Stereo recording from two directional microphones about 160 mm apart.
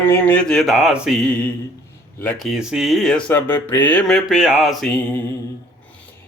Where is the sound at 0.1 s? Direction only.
10° left (ahead or behind).